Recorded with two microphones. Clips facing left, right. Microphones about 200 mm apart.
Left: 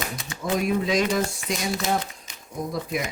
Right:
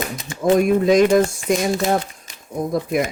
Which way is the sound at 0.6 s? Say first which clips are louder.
Right 7 dB; 50° right (ahead or behind).